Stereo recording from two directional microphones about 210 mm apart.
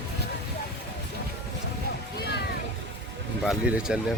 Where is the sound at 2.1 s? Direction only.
50° left (ahead or behind).